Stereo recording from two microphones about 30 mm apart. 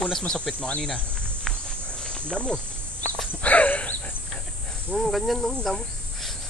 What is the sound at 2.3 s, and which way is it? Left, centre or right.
Speech, left.